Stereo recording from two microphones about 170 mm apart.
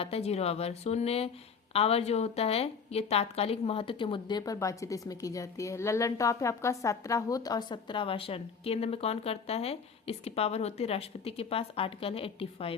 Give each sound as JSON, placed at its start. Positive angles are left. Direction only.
{"t": 0.0, "sound": "a woman's voice", "side_deg": 35}